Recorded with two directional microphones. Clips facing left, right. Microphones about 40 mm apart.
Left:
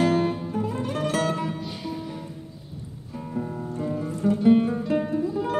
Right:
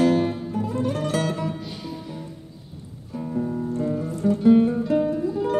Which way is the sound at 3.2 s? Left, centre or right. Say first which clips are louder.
Right 5 dB; centre.